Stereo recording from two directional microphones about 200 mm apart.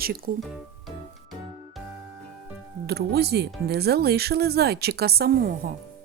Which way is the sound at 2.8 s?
55° right (ahead or behind).